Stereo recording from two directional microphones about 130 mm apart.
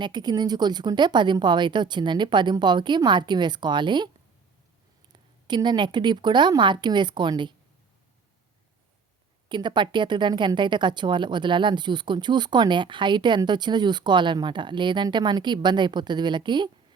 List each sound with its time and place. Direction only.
0.0 s speech: 35° right (ahead or behind)
9.5 s speech: 35° right (ahead or behind)